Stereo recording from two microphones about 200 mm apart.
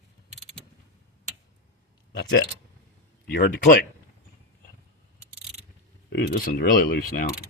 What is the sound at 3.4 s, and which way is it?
Speech, 45° left (ahead or behind).